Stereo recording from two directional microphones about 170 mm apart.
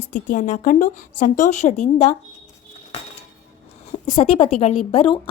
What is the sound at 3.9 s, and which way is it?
A woman's voice, 35° left (ahead or behind).